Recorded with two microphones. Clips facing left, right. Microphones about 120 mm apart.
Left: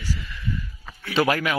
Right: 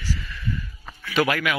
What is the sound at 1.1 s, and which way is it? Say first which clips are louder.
Speech: left 1 dB; 30° left (ahead or behind).